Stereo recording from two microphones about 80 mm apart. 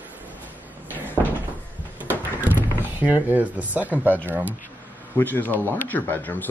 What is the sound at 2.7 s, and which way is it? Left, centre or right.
Speech, right.